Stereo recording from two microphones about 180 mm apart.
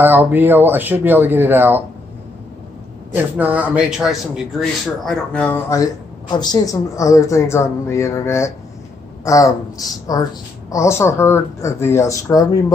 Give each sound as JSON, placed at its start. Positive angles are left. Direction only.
{"t": 0.0, "sound": "speech", "side_deg": -10}
{"t": 3.2, "sound": "speech", "side_deg": -10}
{"t": 5.7, "sound": "a woman's voice", "side_deg": 20}